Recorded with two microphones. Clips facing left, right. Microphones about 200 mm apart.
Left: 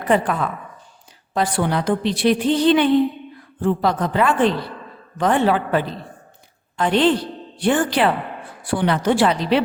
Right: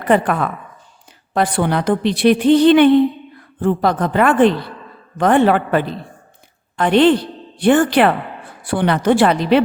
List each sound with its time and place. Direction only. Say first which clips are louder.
0.1 s a woman's voice: right 3 dB; 60° right (ahead or behind)